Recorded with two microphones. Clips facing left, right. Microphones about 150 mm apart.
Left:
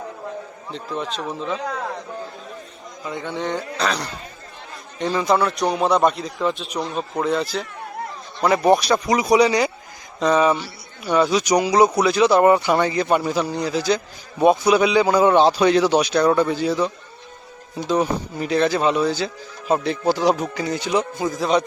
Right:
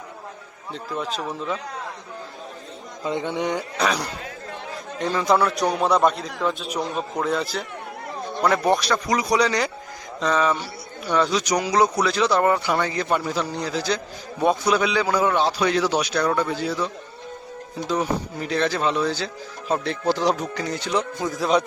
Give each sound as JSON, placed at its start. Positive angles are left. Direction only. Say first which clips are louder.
{"t": 0.7, "sound": "a man's voice", "louder": "left 1 dB", "side_deg": 0}
{"t": 3.0, "sound": "speech", "louder": "right 2 dB", "side_deg": -20}
{"t": 4.9, "sound": "a man's voice", "louder": "left 1 dB", "side_deg": 0}
{"t": 8.6, "sound": "a man's voice", "louder": "left 4 dB", "side_deg": 15}